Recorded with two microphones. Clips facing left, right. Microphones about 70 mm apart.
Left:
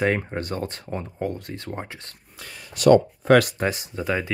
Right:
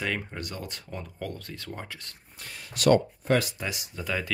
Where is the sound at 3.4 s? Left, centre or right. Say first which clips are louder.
Left 9 dB; left.